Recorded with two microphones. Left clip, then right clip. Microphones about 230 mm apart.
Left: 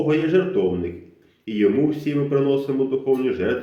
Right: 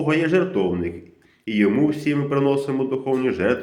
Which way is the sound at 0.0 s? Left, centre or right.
Right.